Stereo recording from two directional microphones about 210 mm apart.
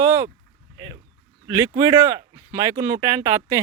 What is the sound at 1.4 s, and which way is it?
Speech, 15° right (ahead or behind).